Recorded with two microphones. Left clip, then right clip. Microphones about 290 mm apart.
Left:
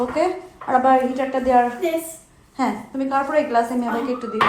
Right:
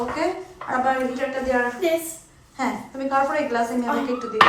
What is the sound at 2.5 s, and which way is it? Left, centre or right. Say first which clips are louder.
A woman's voice: left 3 dB; centre.